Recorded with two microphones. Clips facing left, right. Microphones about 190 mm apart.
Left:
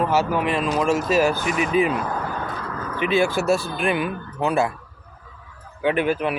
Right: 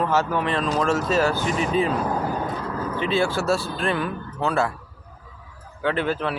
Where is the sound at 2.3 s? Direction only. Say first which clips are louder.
Right 3 dB; 10° right (ahead or behind).